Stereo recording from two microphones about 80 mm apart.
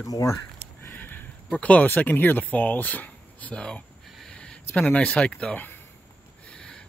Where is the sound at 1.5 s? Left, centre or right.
Centre.